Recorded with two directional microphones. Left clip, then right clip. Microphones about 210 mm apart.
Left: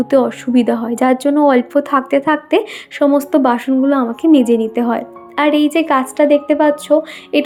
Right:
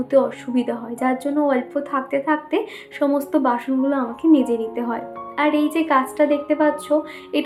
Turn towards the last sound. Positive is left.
turn(degrees=35)  # may be behind; listen again after turning